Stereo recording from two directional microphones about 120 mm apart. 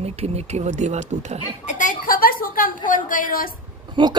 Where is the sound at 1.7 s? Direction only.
90° left.